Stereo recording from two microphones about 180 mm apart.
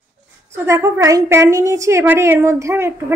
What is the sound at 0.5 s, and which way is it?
A woman's voice, 15° right (ahead or behind).